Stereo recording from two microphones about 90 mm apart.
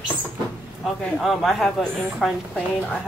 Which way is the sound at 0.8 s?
5° left (ahead or behind).